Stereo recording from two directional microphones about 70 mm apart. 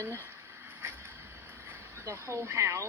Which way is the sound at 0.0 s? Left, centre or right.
Right.